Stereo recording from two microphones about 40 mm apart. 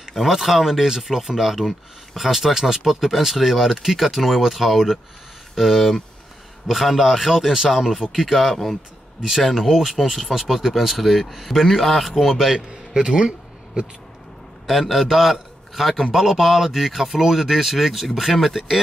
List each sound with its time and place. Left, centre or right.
0.1 s a man's voice: centre
12.5 s a man's voice: centre
14.7 s a man's voice: centre